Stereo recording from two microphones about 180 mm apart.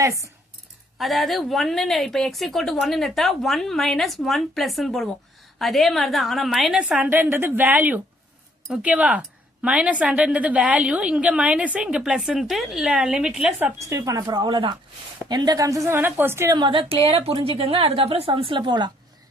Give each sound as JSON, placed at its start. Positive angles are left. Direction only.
{"t": 0.0, "sound": "speech", "side_deg": -15}
{"t": 0.9, "sound": "a woman's voice", "side_deg": 0}
{"t": 13.7, "sound": "a woman's voice", "side_deg": -20}